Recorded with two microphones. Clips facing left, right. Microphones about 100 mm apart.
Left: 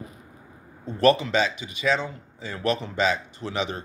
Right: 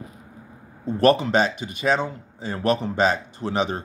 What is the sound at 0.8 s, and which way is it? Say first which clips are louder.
Speech: right 2 dB; 45° right (ahead or behind).